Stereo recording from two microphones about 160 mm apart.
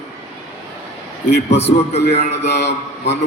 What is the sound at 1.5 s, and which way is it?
A man's voice, 40° left (ahead or behind).